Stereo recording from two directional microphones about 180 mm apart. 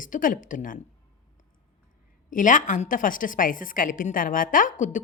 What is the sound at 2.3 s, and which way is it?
A woman's voice, 45° left (ahead or behind).